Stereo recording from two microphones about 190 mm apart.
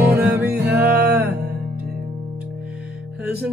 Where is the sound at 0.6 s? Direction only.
60° right (ahead or behind).